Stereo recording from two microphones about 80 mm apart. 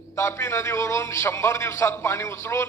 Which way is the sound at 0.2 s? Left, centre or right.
Left.